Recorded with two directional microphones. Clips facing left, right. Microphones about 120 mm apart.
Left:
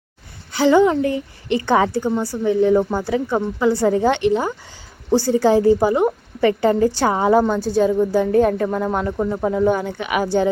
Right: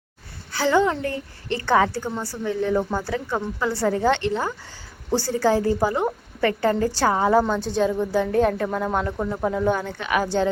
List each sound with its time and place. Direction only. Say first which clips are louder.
0.5 s a woman's voice: left 6 dB; 15° left (ahead or behind)